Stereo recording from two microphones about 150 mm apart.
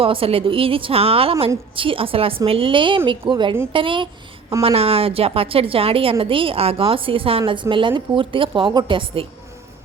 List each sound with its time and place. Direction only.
0.0 s a woman's voice: 40° right (ahead or behind)